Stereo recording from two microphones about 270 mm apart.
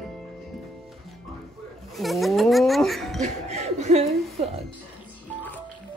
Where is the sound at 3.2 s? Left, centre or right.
Right.